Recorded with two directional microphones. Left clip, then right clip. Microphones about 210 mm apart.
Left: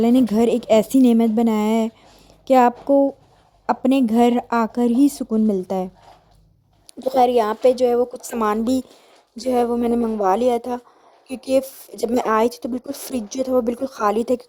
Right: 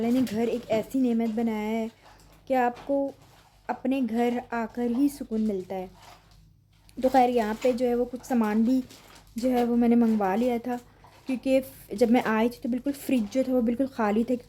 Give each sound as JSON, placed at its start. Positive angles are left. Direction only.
{"t": 0.0, "sound": "speech", "side_deg": 40}
{"t": 7.2, "sound": "a woman's voice", "side_deg": 35}